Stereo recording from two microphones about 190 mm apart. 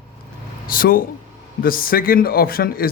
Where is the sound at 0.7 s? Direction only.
50° left (ahead or behind).